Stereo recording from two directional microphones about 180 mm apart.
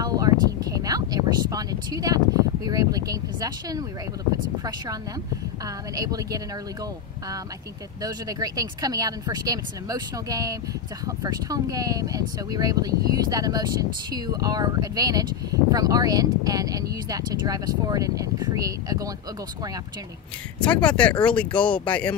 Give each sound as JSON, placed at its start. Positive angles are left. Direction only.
{"t": 0.0, "sound": "a sound", "side_deg": -20}
{"t": 5.9, "sound": "speech", "side_deg": -20}
{"t": 8.0, "sound": "speech", "side_deg": -20}
{"t": 20.5, "sound": "speech", "side_deg": 5}